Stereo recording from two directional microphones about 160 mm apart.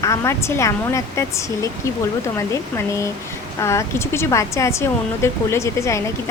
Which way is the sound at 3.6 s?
20° left (ahead or behind).